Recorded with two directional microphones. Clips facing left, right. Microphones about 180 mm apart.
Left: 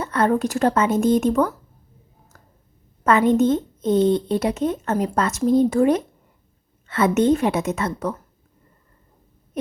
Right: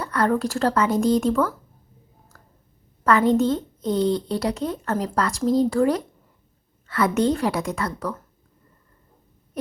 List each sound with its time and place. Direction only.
0.0 s speech: 20° left (ahead or behind)
3.0 s speech: 20° left (ahead or behind)